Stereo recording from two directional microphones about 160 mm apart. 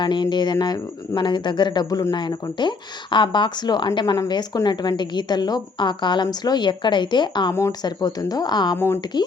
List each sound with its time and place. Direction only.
0.0 s speech: 30° left (ahead or behind)